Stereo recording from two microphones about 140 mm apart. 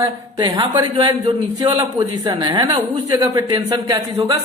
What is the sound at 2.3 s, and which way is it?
A woman's voice, 30° right (ahead or behind).